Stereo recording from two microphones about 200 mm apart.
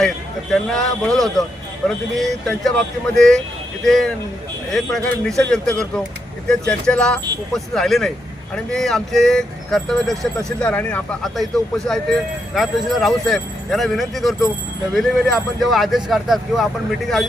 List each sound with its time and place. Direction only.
0.5 s speech: centre (ahead or behind)